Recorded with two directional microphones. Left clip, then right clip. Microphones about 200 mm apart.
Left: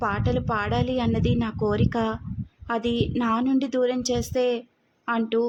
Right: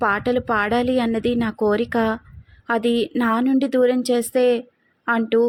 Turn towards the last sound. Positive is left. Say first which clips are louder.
# right 6 dB
turn(degrees=-10)  # may be behind; listen again after turning